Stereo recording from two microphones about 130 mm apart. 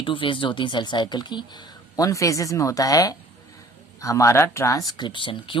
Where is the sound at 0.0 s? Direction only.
40° left (ahead or behind).